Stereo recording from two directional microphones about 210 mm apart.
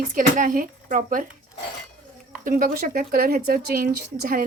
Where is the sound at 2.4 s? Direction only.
40° right (ahead or behind).